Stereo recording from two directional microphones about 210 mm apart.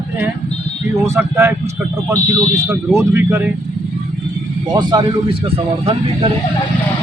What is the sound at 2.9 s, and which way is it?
Speech, 10° right (ahead or behind).